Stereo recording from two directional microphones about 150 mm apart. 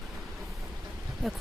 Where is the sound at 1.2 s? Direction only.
Centre (ahead or behind).